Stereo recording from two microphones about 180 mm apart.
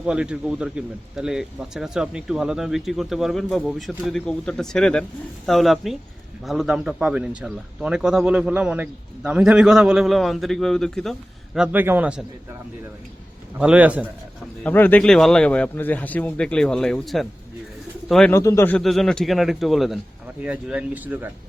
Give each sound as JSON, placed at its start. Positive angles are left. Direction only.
{"t": 0.0, "sound": "speech", "side_deg": -5}
{"t": 13.6, "sound": "speech", "side_deg": -5}
{"t": 14.6, "sound": "speech", "side_deg": 10}
{"t": 18.3, "sound": "speech", "side_deg": 15}
{"t": 18.8, "sound": "speech", "side_deg": 0}